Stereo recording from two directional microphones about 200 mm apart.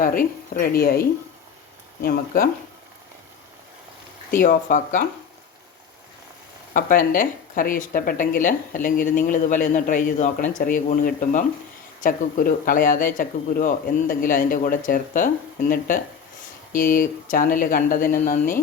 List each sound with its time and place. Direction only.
0.0 s speech: 45° left (ahead or behind)
4.4 s speech: 40° left (ahead or behind)
6.7 s speech: 45° left (ahead or behind)
16.7 s speech: 45° left (ahead or behind)